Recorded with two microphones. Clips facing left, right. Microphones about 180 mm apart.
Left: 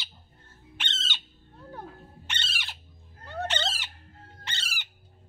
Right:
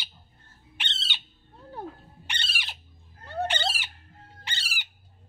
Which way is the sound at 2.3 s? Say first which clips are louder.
Right 1 dB; 15° right (ahead or behind).